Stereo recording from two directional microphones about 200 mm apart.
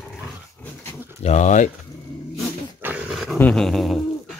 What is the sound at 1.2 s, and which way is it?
Pigeon, 35° left (ahead or behind).